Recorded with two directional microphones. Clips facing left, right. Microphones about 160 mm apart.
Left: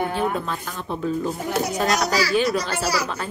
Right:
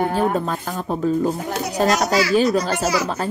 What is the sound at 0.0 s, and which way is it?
A woman's voice, 40° right (ahead or behind).